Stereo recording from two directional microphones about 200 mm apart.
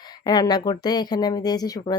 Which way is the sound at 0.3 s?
20° left (ahead or behind).